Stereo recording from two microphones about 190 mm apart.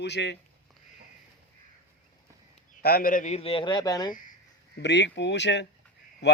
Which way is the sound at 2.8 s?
50° left (ahead or behind).